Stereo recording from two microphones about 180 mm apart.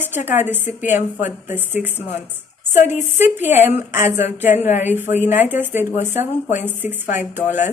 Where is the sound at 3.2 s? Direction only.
10° right (ahead or behind).